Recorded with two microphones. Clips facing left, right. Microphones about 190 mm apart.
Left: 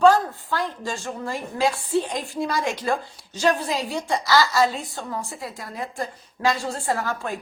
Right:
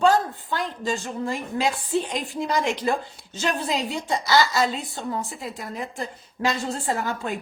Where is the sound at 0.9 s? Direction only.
20° right (ahead or behind).